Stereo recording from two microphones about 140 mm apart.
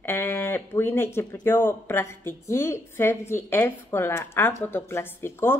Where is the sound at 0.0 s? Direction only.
15° left (ahead or behind).